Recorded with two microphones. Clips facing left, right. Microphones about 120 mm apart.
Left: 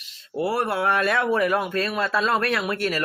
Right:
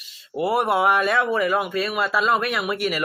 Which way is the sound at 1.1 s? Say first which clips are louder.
Even; 65° left (ahead or behind).